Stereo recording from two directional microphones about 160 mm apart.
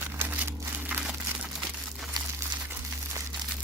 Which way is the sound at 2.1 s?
25° right (ahead or behind).